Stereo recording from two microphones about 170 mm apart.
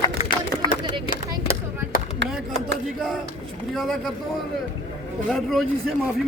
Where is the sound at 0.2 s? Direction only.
40° left (ahead or behind).